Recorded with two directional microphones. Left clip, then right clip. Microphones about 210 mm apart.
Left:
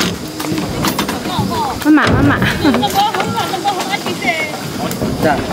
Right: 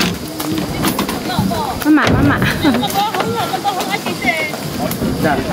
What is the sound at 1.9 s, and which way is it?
Speech, 5° left (ahead or behind).